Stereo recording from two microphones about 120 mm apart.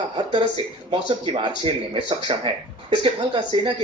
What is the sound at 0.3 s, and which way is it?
Speech, 50° right (ahead or behind).